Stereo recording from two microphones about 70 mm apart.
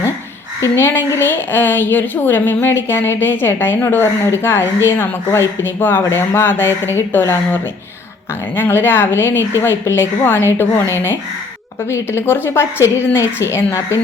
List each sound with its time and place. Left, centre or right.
0.9 s a woman's voice: left